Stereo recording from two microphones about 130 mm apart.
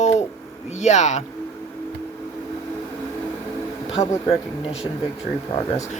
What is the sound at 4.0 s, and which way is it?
Speech, 55° left (ahead or behind).